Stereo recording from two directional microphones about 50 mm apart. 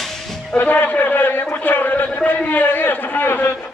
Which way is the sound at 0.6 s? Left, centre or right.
Left.